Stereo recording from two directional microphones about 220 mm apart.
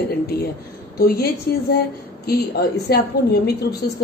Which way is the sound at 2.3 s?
45° left (ahead or behind).